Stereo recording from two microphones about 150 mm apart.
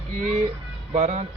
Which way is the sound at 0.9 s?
55° right (ahead or behind).